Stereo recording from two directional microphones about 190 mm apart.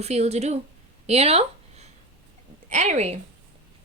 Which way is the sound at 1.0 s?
35° right (ahead or behind).